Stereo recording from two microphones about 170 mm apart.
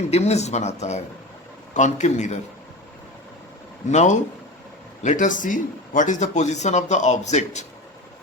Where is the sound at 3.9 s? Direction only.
45° left (ahead or behind).